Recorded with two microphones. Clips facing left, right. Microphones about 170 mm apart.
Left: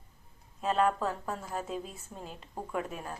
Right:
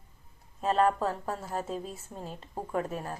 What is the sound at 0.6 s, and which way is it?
Speech, 35° right (ahead or behind).